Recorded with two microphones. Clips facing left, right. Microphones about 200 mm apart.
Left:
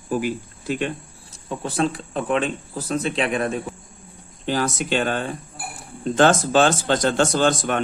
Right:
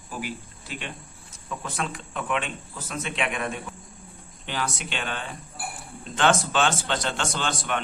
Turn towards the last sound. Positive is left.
turn(degrees=45)  # may be behind; listen again after turning